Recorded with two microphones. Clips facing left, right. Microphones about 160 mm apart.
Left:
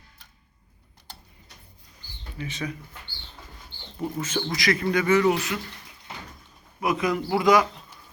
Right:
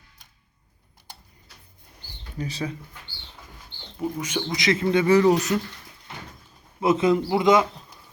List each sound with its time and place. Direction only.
2.4 s speech: 35° right (ahead or behind)
4.0 s speech: 10° right (ahead or behind)
4.5 s speech: 20° right (ahead or behind); by 5.5 s 40° right (ahead or behind)
6.7 s speech: 25° right (ahead or behind)